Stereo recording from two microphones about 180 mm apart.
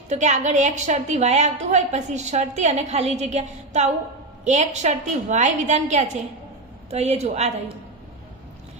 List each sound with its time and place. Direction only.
0.1 s a woman's voice: 40° right (ahead or behind)